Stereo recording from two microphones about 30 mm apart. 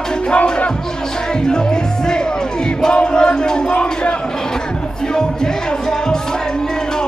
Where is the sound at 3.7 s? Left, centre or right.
Left.